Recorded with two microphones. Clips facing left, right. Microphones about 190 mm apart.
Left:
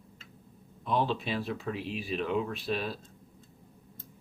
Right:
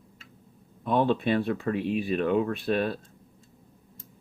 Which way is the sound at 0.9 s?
55° right (ahead or behind).